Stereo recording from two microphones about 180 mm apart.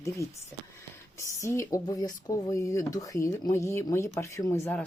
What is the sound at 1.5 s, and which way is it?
Speech, 15° left (ahead or behind).